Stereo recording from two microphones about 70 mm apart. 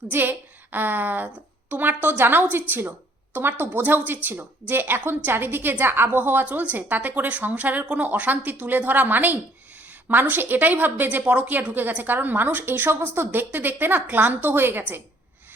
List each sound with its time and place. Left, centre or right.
0.1 s a woman's voice: right